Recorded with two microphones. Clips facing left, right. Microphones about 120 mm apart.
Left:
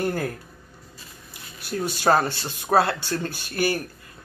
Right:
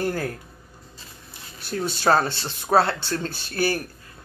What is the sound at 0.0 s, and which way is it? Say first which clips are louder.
Speech: even; 20° left (ahead or behind).